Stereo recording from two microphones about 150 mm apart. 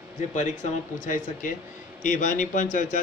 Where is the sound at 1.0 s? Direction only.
60° left (ahead or behind).